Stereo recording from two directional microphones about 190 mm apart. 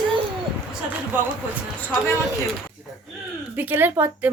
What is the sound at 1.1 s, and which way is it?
Speech, 10° right (ahead or behind).